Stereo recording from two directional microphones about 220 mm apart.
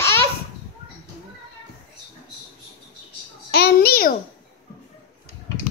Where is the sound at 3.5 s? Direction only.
45° left (ahead or behind).